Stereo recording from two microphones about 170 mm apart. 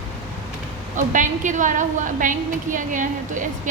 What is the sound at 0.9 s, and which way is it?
A woman's voice, 50° right (ahead or behind).